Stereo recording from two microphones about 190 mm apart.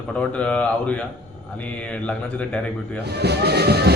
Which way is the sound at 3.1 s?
60° right (ahead or behind).